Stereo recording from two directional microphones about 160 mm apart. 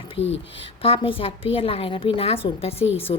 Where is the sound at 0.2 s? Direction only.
40° left (ahead or behind).